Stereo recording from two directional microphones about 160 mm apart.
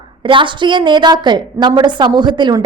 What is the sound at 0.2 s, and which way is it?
A woman's voice, 30° right (ahead or behind).